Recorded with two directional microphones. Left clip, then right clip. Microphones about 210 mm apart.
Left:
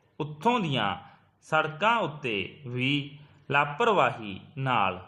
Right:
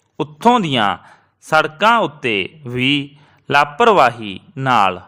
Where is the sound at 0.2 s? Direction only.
45° right (ahead or behind).